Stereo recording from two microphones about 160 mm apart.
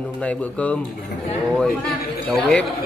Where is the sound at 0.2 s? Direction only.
10° left (ahead or behind).